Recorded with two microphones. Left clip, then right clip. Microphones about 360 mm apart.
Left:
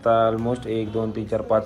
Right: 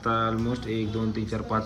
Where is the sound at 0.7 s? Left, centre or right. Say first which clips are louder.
Left 5 dB; left.